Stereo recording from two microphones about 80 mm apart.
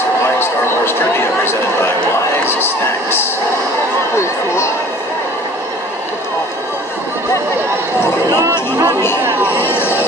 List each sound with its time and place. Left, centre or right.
0.4 s a sound: left
8.5 s chatter: right
9.7 s chatter: left